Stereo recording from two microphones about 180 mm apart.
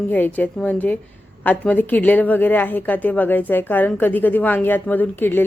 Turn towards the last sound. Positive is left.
turn(degrees=10)  # may be behind; listen again after turning